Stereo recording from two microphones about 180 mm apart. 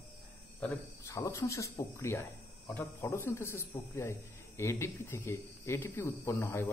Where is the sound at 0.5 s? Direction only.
15° left (ahead or behind).